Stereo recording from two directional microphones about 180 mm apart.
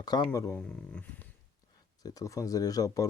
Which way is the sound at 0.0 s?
20° left (ahead or behind).